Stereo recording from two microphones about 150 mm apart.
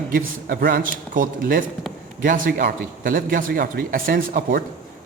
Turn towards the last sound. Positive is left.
turn(degrees=-75)  # may be behind; listen again after turning